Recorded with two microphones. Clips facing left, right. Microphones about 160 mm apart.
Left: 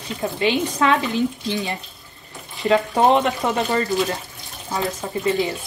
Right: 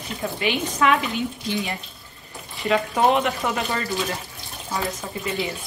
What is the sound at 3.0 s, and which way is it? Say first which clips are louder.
Speech: left 3 dB; 35° left (ahead or behind).